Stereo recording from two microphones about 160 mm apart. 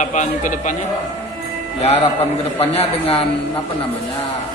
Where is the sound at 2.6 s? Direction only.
40° left (ahead or behind).